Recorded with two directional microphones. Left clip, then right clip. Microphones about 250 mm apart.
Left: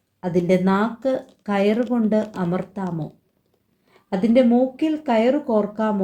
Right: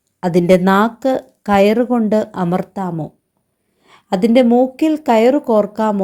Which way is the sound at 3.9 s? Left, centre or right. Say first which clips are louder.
Right 7 dB; right.